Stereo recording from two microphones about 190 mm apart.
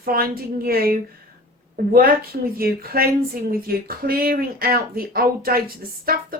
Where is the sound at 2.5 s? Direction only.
50° right (ahead or behind).